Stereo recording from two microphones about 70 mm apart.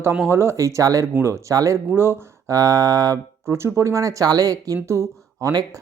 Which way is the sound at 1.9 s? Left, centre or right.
Right.